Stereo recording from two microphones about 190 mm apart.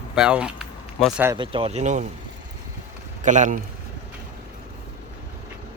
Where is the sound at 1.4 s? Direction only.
30° right (ahead or behind).